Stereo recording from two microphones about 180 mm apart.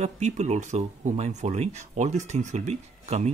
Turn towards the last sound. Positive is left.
turn(degrees=-40)  # may be behind; listen again after turning